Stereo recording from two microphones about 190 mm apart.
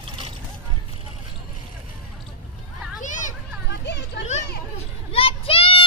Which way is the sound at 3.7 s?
65° left (ahead or behind).